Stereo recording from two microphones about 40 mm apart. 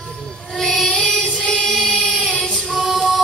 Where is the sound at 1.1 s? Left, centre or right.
Left.